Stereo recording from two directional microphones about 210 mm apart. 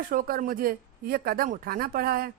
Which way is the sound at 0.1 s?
40° right (ahead or behind).